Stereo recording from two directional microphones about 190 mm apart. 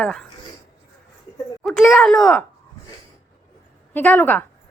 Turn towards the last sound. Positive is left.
turn(degrees=10)  # may be behind; listen again after turning